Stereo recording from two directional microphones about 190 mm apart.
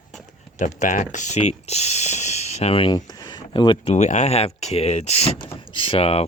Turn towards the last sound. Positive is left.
turn(degrees=30)  # may be behind; listen again after turning